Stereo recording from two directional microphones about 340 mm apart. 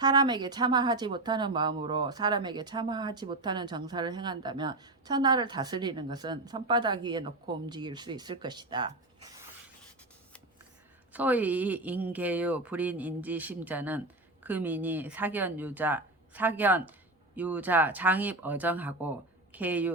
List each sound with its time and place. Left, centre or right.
0.0 s speech: centre
11.1 s speech: centre